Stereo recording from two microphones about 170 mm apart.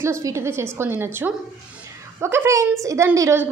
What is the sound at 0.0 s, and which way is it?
A woman's voice, 15° right (ahead or behind).